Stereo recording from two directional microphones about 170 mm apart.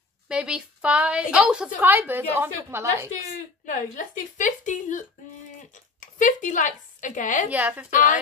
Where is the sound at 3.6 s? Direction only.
50° left (ahead or behind).